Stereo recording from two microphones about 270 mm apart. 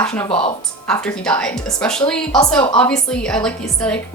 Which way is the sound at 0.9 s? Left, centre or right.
Centre.